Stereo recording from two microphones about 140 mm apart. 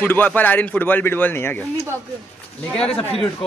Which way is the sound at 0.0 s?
15° left (ahead or behind).